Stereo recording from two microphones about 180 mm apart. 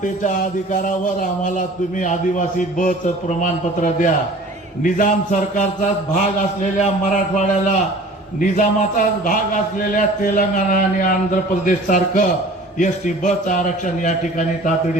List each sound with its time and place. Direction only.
0.0 s a man's voice: 45° left (ahead or behind)